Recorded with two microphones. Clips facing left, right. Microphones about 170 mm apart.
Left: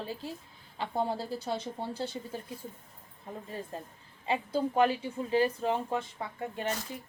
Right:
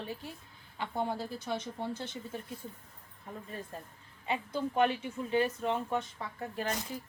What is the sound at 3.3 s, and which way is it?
A woman's voice, 30° left (ahead or behind).